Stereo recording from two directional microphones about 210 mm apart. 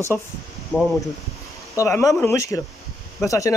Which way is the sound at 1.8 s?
15° left (ahead or behind).